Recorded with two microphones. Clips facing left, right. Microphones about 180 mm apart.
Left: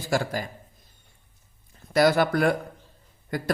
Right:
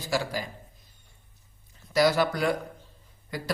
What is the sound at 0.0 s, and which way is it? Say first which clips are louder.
Speech: left 3 dB; 50° left (ahead or behind).